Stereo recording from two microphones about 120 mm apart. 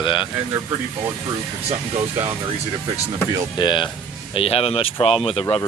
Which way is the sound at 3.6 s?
40° left (ahead or behind).